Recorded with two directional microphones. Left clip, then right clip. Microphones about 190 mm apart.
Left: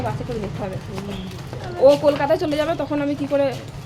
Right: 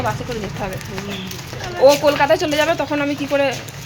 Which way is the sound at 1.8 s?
5° left (ahead or behind).